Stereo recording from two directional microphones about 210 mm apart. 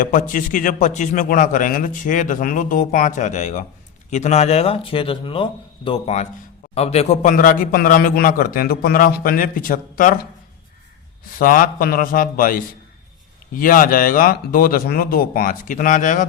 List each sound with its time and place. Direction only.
0.0 s a man's voice: 40° left (ahead or behind)
11.3 s a man's voice: 40° left (ahead or behind)